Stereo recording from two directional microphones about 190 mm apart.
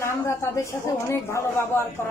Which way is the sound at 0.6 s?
15° left (ahead or behind).